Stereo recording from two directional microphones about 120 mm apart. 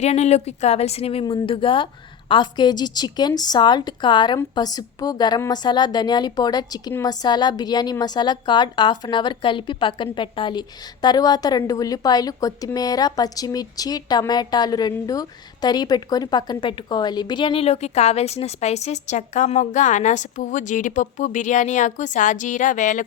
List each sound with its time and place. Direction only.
0.0 s speech: 65° left (ahead or behind)
1.2 s a woman's voice: 40° left (ahead or behind); by 23.0 s 90° left